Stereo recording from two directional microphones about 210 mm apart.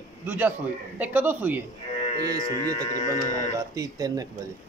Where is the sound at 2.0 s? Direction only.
30° left (ahead or behind).